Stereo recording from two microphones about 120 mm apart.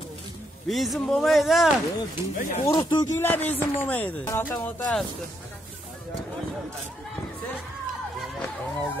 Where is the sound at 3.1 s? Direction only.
15° left (ahead or behind).